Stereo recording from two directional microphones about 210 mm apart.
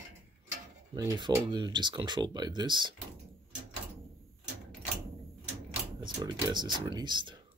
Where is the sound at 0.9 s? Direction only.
20° right (ahead or behind).